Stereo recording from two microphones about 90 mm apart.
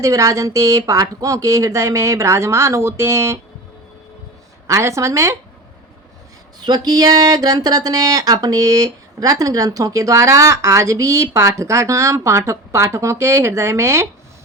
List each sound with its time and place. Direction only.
0.0 s speech: 35° right (ahead or behind)
4.6 s speech: 35° right (ahead or behind)
6.7 s speech: 45° right (ahead or behind); by 14.1 s 30° right (ahead or behind)